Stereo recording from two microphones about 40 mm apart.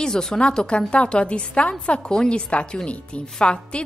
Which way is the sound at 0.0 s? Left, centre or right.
Centre.